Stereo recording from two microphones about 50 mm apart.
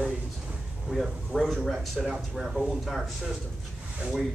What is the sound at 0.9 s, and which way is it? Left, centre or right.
Speech, centre.